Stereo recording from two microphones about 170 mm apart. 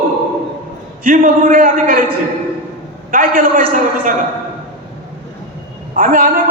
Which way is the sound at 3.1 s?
55° right (ahead or behind).